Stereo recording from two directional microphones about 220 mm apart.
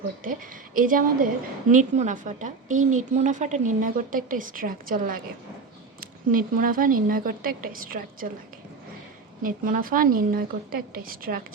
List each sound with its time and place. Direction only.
0.3 s a woman's voice: 40° right (ahead or behind)
9.4 s a woman's voice: 40° right (ahead or behind)